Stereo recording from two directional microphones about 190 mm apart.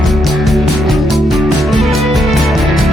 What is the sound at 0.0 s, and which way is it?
Music, centre (ahead or behind).